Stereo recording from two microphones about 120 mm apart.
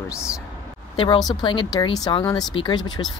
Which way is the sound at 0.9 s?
45° left (ahead or behind).